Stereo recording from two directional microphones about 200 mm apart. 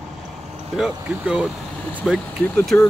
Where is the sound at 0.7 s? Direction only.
5° right (ahead or behind).